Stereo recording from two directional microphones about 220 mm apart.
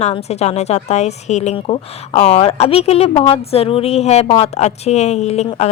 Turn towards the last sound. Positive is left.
turn(degrees=30)  # may be behind; listen again after turning